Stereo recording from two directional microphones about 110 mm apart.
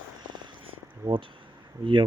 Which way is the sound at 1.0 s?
25° right (ahead or behind).